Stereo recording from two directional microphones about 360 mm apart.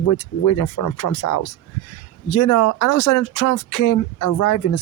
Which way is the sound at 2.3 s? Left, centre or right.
Left.